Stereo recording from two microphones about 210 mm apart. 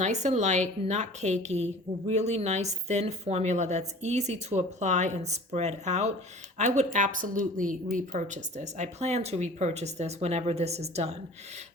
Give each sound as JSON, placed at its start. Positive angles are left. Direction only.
{"t": 0.0, "sound": "a woman's voice", "side_deg": -35}